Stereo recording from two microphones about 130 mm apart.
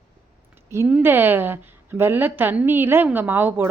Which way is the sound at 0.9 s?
10° right (ahead or behind).